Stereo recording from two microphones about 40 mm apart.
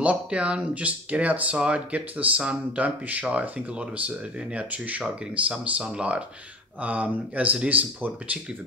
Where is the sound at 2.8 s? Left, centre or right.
Right.